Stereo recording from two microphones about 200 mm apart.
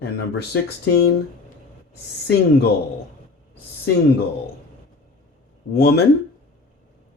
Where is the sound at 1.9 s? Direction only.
55° left (ahead or behind).